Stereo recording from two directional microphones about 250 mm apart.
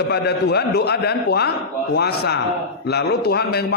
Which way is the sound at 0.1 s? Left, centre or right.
Left.